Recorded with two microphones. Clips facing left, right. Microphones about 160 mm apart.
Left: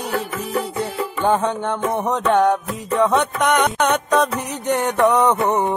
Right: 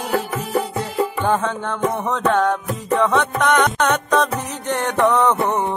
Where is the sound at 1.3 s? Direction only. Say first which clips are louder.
Left 2 dB; 15° left (ahead or behind).